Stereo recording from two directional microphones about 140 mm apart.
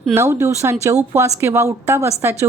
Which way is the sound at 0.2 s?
20° right (ahead or behind).